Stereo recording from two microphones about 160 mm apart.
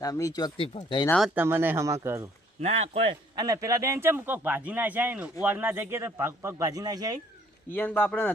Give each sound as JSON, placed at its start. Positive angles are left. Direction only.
{"t": 0.0, "sound": "speech", "side_deg": 20}
{"t": 1.2, "sound": "a man's voice", "side_deg": -10}
{"t": 2.6, "sound": "speech", "side_deg": -40}
{"t": 3.3, "sound": "a man's voice", "side_deg": -20}
{"t": 7.7, "sound": "a man's voice", "side_deg": 10}